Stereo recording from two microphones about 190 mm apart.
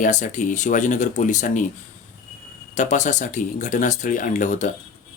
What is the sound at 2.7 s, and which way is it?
Speech, 40° left (ahead or behind).